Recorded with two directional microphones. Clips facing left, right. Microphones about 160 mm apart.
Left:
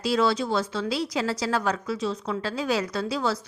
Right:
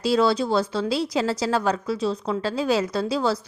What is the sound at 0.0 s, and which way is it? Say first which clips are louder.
A woman's voice: right 3 dB; 35° right (ahead or behind).